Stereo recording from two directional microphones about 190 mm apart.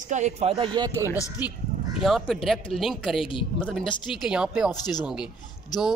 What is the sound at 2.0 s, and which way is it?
A man's voice, centre (ahead or behind).